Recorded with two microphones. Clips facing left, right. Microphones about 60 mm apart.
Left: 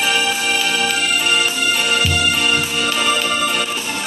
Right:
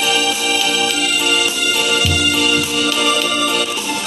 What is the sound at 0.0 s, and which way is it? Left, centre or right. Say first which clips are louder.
Music: right 1 dB; left.